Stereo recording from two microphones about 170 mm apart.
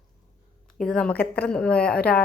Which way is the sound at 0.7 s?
5° left (ahead or behind).